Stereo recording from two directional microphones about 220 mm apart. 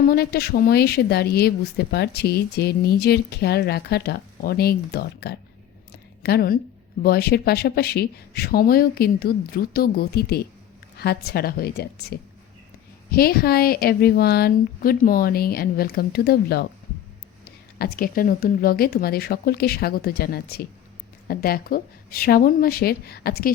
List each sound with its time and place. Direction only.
0.1 s speech: 45° left (ahead or behind)
5.9 s a sound: 45° left (ahead or behind)
7.0 s speech: 45° left (ahead or behind)
17.7 s speech: 45° left (ahead or behind)